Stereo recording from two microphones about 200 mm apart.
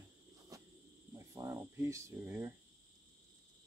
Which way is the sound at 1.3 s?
15° right (ahead or behind).